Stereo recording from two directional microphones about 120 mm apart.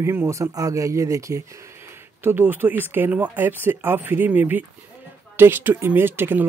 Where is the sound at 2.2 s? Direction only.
15° right (ahead or behind).